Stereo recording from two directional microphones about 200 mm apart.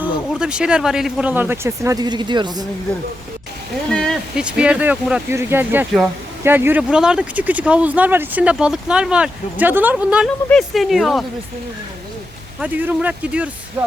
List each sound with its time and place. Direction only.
0.0 s speech: 5° right (ahead or behind); by 2.6 s 20° right (ahead or behind)
3.8 s speech: 5° left (ahead or behind)
12.5 s speech: 10° right (ahead or behind)